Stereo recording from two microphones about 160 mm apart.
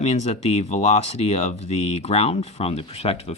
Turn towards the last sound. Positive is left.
turn(degrees=40)  # may be behind; listen again after turning